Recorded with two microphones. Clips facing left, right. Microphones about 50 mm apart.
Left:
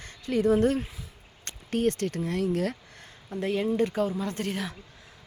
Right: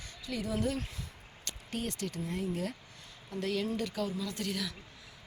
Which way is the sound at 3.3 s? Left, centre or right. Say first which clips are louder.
Left 6 dB; left.